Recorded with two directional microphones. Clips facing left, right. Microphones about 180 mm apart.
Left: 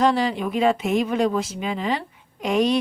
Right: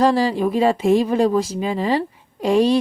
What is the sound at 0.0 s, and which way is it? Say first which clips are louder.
Speech: right 4 dB; 35° right (ahead or behind).